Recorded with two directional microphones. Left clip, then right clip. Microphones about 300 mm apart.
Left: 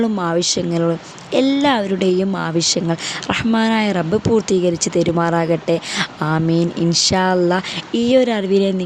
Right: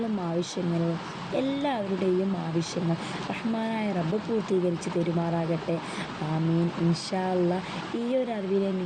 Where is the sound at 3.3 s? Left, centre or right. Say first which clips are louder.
Left 15 dB; left.